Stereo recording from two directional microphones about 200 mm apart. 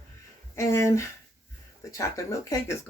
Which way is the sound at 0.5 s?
15° left (ahead or behind).